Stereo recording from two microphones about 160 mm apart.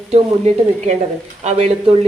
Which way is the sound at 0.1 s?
45° right (ahead or behind).